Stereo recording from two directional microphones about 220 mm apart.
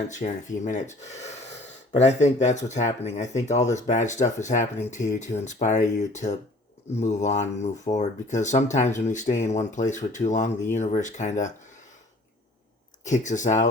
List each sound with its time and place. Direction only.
0.1 s speech: 35° left (ahead or behind)
1.0 s gasp: 30° left (ahead or behind)
1.9 s speech: 30° left (ahead or behind)
13.1 s speech: 35° left (ahead or behind)